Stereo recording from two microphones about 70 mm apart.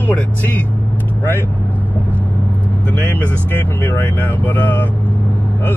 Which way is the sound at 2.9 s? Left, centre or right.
Left.